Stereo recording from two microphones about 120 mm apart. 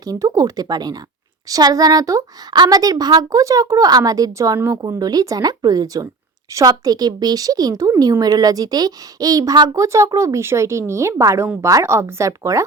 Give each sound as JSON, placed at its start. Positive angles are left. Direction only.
{"t": 0.0, "sound": "a woman's voice", "side_deg": -30}